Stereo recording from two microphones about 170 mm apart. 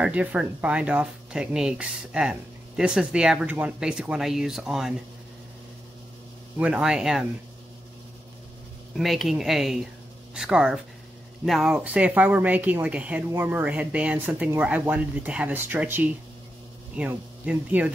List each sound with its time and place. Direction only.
0.0 s speech: 10° right (ahead or behind)
6.6 s speech: 5° right (ahead or behind)
8.9 s speech: centre (ahead or behind)
17.5 s speech: 10° right (ahead or behind)